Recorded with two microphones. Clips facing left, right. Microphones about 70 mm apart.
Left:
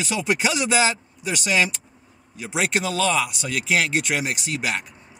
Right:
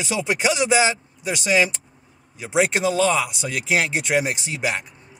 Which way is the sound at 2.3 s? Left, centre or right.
Right.